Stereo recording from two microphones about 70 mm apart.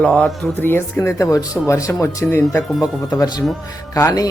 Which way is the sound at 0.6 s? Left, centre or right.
Left.